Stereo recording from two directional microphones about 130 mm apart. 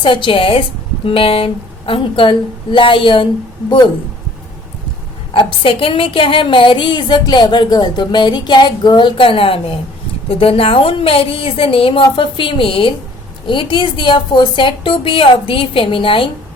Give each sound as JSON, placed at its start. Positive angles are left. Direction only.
{"t": 0.0, "sound": "a woman's voice", "side_deg": 40}
{"t": 5.3, "sound": "a woman's voice", "side_deg": 40}